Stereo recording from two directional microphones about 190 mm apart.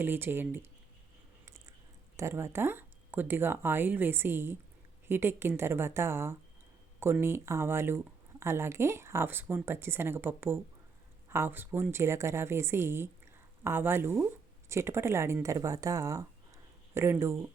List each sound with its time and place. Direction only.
0.0 s a woman's voice: 10° right (ahead or behind)
2.1 s a woman's voice: 15° right (ahead or behind)